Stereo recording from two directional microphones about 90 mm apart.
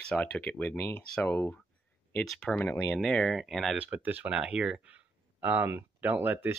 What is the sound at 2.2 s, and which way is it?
Speech, 5° left (ahead or behind).